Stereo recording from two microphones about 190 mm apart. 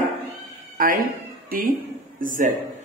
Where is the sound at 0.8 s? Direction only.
50° right (ahead or behind).